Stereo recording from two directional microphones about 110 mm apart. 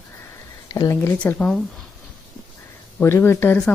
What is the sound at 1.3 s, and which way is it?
Speech, 5° left (ahead or behind).